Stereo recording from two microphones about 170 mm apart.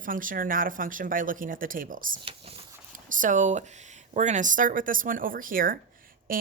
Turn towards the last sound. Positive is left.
turn(degrees=-55)  # may be behind; listen again after turning